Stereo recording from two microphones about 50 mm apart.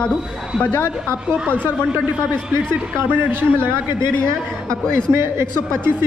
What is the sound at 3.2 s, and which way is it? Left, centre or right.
Speech, right.